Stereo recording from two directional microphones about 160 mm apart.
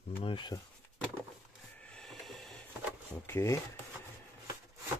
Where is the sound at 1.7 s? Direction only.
5° left (ahead or behind).